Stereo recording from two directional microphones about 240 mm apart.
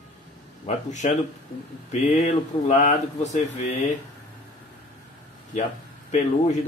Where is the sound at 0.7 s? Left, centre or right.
Left.